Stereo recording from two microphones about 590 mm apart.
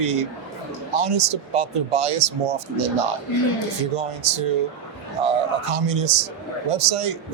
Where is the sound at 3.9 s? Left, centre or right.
Right.